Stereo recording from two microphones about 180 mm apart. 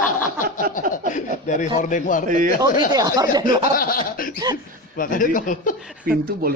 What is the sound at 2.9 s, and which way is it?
Speech, 20° right (ahead or behind).